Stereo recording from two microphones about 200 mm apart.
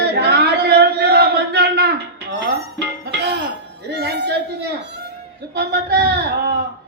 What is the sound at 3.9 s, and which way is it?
Speech, 55° right (ahead or behind).